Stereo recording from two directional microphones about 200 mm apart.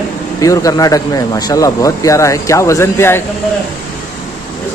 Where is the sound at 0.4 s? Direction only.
15° left (ahead or behind).